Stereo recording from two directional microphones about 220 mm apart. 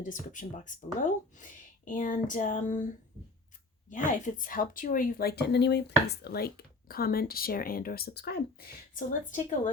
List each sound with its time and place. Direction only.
0.0 s speech: 35° left (ahead or behind)
3.9 s speech: 35° left (ahead or behind)